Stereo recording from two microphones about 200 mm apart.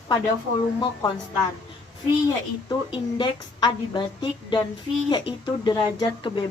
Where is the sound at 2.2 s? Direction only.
20° left (ahead or behind).